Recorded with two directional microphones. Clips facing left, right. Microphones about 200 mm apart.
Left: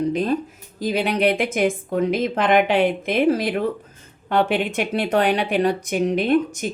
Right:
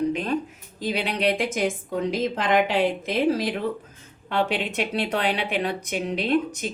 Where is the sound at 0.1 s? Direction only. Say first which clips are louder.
Left 4 dB; 40° left (ahead or behind).